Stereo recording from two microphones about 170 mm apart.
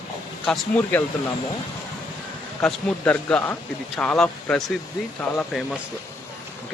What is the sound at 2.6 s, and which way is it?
A woman's voice, 5° left (ahead or behind).